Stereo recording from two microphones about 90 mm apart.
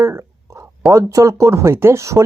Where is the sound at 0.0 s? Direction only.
30° right (ahead or behind).